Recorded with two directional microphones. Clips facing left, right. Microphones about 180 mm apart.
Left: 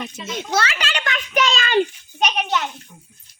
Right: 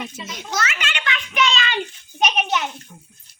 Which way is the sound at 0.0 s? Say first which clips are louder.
Left 1 dB; 10° right (ahead or behind).